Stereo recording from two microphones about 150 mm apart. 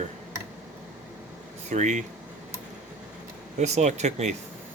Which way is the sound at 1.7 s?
50° right (ahead or behind).